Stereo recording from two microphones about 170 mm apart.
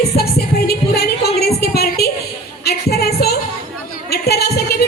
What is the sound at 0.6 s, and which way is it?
Music, 70° left (ahead or behind).